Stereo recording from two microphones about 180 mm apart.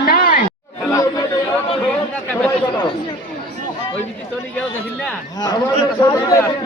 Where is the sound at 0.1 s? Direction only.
55° left (ahead or behind).